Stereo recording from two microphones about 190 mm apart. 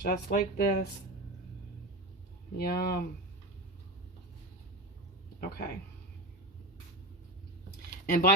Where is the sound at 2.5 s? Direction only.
50° left (ahead or behind).